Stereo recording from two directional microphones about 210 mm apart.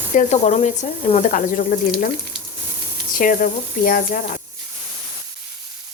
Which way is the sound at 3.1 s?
40° left (ahead or behind).